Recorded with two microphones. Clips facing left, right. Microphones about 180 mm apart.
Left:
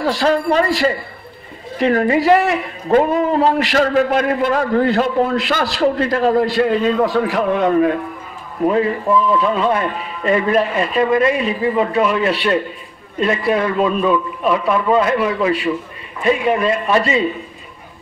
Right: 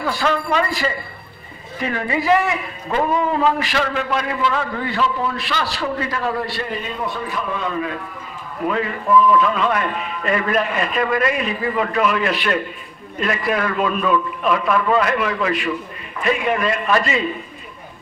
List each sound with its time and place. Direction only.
0.0 s a man's voice: 35° left (ahead or behind)
3.5 s a man's voice: 40° left (ahead or behind)
6.6 s a man's voice: 90° left; by 7.9 s 55° left (ahead or behind)
8.6 s a man's voice: 30° left (ahead or behind)